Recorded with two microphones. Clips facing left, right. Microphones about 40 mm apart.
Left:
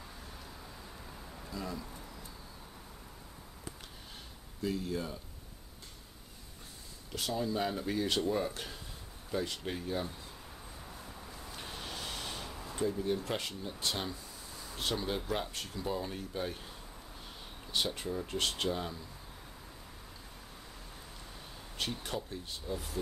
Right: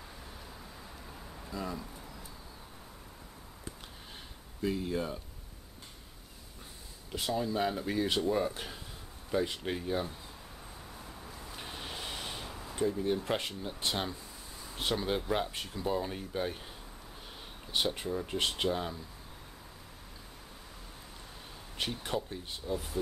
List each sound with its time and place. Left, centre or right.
1.0 s a sound: centre
1.9 s pigeon: centre
4.6 s speech: right
7.1 s speech: centre
11.0 s a sound: centre
13.3 s speech: centre
17.9 s speech: centre
21.7 s speech: centre